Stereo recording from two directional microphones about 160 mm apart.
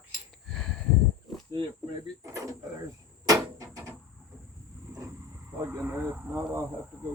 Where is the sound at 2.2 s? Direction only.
20° right (ahead or behind).